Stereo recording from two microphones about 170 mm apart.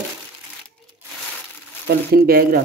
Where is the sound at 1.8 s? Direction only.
60° right (ahead or behind).